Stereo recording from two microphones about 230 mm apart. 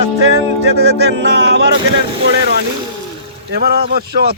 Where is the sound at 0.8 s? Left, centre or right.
Right.